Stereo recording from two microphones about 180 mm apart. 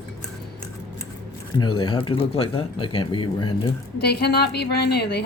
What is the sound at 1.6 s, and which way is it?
Speech, 25° left (ahead or behind).